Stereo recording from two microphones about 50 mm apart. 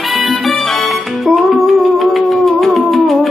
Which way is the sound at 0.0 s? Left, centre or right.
Centre.